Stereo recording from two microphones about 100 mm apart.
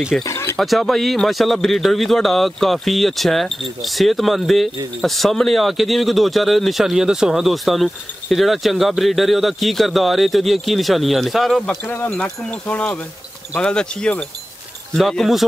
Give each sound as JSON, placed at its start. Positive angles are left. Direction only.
{"t": 0.2, "sound": "speech", "side_deg": 30}
{"t": 0.6, "sound": "speech", "side_deg": 0}
{"t": 11.8, "sound": "speech", "side_deg": 20}
{"t": 12.1, "sound": "wind chime", "side_deg": 10}
{"t": 15.0, "sound": "speech", "side_deg": 0}